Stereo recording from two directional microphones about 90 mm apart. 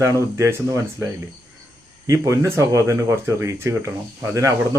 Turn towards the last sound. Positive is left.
turn(degrees=-35)  # may be behind; listen again after turning